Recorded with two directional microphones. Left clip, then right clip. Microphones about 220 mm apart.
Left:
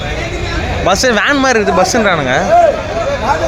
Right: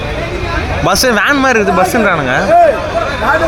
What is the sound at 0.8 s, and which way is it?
Speech, 10° right (ahead or behind).